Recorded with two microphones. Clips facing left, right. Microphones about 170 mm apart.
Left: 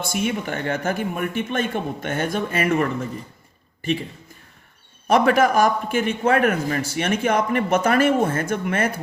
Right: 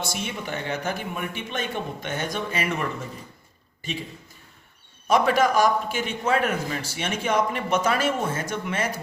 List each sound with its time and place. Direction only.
0.3 s a man's voice: 50° left (ahead or behind)
5.0 s a man's voice: 55° left (ahead or behind)